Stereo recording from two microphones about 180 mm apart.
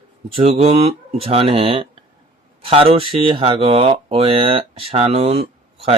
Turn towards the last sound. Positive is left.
turn(degrees=-35)  # may be behind; listen again after turning